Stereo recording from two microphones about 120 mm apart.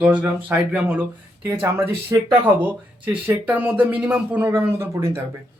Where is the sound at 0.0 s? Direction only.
10° right (ahead or behind).